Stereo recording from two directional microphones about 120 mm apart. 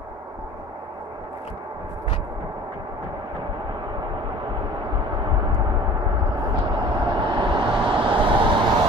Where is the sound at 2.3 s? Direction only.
35° right (ahead or behind).